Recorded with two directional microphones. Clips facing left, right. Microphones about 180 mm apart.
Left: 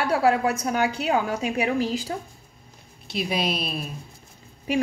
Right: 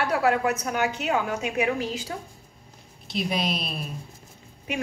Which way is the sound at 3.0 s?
Centre (ahead or behind).